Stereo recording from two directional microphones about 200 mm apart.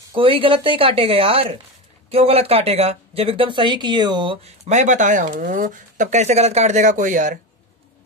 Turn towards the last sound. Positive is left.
turn(degrees=-40)  # may be behind; listen again after turning